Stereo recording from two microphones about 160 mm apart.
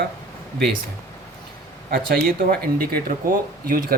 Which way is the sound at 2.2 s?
65° right (ahead or behind).